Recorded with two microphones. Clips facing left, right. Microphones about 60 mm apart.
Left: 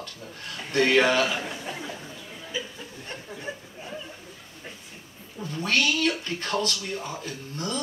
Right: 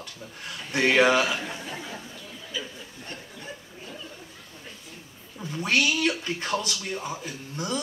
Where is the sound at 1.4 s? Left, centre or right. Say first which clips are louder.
Left 1 dB; left.